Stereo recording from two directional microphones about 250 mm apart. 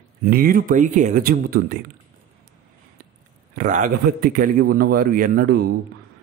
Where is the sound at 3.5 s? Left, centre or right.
Right.